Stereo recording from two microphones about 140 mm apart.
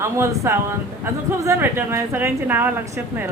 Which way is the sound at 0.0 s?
20° right (ahead or behind).